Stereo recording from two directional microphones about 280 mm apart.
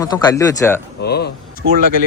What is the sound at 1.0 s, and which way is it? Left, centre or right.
Speech, left.